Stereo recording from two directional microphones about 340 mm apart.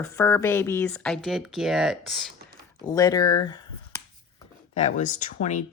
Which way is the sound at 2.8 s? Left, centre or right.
Centre.